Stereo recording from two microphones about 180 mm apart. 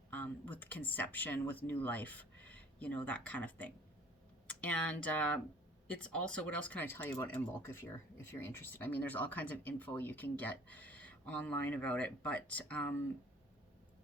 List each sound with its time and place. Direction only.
0.1 s speech: 10° left (ahead or behind)
4.4 s a sound: 10° left (ahead or behind)
5.0 s speech: 5° left (ahead or behind)